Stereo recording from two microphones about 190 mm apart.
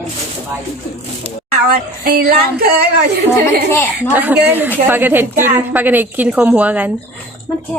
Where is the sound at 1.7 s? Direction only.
55° right (ahead or behind).